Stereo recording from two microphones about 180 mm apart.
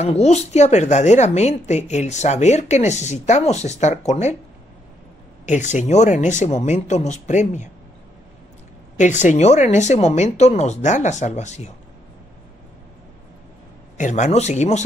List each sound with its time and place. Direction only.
0.0 s speech: 35° left (ahead or behind)
5.4 s speech: 40° left (ahead or behind)
8.9 s speech: 40° left (ahead or behind)
13.9 s speech: 45° left (ahead or behind)